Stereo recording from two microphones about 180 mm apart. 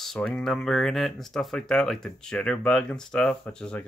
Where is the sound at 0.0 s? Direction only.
5° left (ahead or behind).